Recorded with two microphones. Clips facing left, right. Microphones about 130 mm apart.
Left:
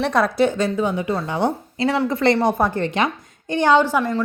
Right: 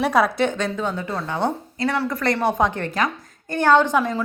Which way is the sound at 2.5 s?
10° left (ahead or behind).